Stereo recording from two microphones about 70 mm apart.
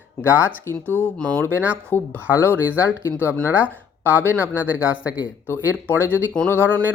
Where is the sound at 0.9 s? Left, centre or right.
Left.